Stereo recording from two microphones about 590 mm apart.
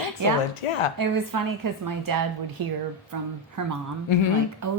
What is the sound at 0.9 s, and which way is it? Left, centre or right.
A woman's voice, right.